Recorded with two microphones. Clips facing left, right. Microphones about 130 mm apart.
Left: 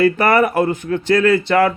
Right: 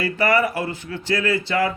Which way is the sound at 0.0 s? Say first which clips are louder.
Left 6 dB; 55° left (ahead or behind).